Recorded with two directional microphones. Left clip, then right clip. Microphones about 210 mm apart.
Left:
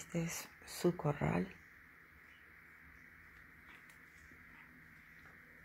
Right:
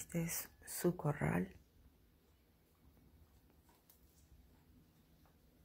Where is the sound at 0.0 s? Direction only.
15° right (ahead or behind).